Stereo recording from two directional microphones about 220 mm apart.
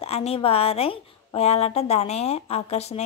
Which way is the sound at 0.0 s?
25° left (ahead or behind).